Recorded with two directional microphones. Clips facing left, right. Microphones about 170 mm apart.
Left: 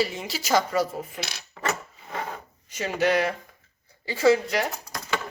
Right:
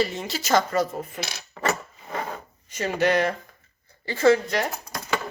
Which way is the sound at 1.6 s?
50° right (ahead or behind).